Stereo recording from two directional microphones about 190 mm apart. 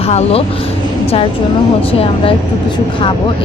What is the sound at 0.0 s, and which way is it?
Speech, 35° left (ahead or behind).